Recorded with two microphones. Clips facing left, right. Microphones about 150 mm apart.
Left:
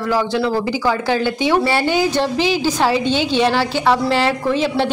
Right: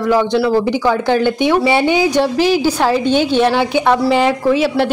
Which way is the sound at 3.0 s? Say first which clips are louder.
Right 4 dB; 50° right (ahead or behind).